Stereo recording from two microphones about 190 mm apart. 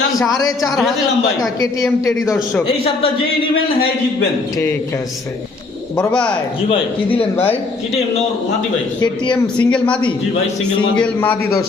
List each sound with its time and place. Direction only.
0.3 s speech: 20° left (ahead or behind)
2.2 s a man's voice: centre (ahead or behind)
6.0 s a man's voice: 5° left (ahead or behind)
6.7 s speech: 30° left (ahead or behind)
9.3 s speech: 5° left (ahead or behind)